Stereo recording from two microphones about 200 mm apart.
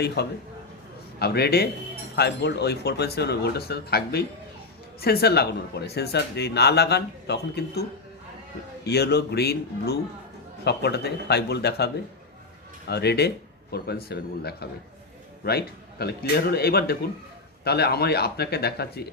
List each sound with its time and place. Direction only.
0.2 s speech: 55° left (ahead or behind)
12.9 s speech: 55° left (ahead or behind)